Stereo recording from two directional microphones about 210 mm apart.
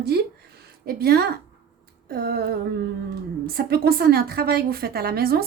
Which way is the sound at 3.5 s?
45° right (ahead or behind).